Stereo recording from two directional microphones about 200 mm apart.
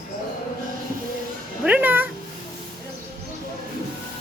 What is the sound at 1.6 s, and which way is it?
Speech, 10° right (ahead or behind).